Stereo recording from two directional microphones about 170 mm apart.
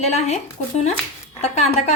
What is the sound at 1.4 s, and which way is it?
Speech, 40° left (ahead or behind).